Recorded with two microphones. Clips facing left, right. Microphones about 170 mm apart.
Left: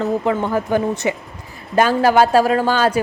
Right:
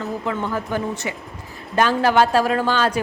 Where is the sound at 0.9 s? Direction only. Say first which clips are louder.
Left 7 dB; 20° left (ahead or behind).